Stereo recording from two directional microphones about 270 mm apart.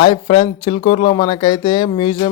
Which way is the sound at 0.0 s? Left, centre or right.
Centre.